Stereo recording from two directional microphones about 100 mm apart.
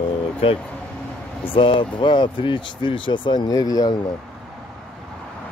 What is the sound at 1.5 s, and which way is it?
Speech, 60° left (ahead or behind).